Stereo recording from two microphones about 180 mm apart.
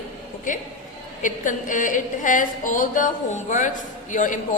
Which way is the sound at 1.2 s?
45° left (ahead or behind).